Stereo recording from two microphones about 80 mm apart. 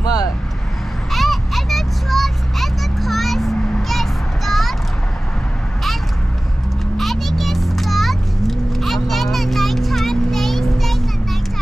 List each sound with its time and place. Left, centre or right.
0.0 s vehicle: left
1.1 s vehicle: centre
7.0 s vehicle: centre